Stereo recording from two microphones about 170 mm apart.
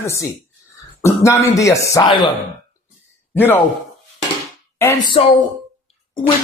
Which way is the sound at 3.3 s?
10° left (ahead or behind).